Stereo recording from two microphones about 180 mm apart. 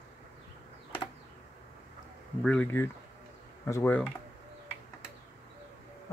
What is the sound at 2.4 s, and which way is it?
Speech, 10° left (ahead or behind).